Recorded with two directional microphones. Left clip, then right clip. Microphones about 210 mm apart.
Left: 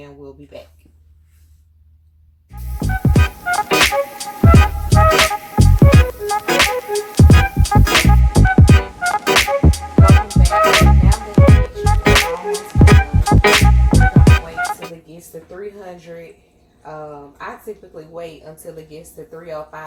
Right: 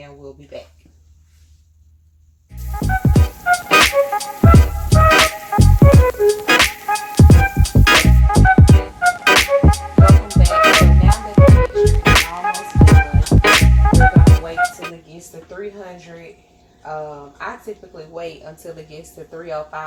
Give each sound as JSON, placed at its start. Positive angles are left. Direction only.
{"t": 2.5, "sound": "music", "side_deg": 0}